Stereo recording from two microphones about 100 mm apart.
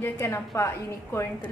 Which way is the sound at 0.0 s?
25° left (ahead or behind).